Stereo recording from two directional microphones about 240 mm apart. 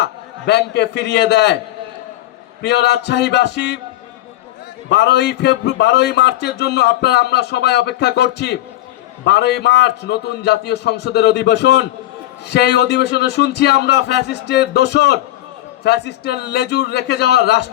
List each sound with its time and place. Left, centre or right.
0.0 s a man's voice: left
2.6 s a man's voice: left
4.9 s a man's voice: left